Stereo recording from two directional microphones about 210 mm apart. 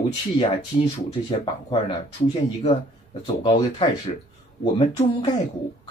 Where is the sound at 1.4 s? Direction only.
25° left (ahead or behind).